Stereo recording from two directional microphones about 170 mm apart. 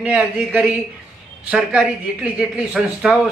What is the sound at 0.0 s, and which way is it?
Speech, 5° right (ahead or behind).